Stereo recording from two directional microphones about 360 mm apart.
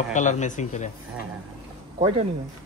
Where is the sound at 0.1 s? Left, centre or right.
Centre.